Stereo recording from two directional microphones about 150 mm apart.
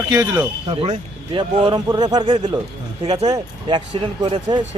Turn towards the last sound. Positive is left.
turn(degrees=-30)  # may be behind; listen again after turning